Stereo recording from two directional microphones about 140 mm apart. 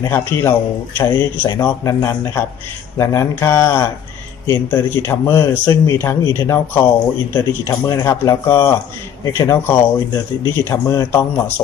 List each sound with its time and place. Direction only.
0.1 s speech: 15° left (ahead or behind)